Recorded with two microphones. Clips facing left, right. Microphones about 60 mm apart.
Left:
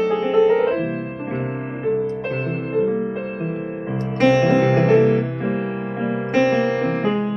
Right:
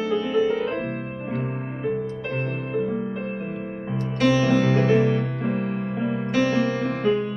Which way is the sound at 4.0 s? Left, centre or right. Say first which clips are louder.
Left 4 dB; left.